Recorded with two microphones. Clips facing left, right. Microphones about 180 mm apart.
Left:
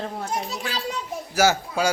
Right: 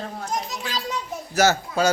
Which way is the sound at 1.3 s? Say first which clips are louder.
Right 1 dB; 10° left (ahead or behind).